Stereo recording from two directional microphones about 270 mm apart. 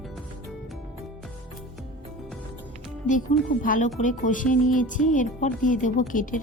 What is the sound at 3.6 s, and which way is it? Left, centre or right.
Speech, left.